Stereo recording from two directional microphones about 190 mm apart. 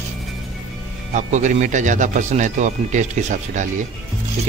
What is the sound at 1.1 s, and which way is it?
A man's voice, 40° right (ahead or behind).